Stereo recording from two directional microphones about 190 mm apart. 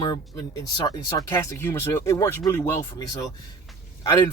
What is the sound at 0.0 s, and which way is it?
Speech, 20° left (ahead or behind).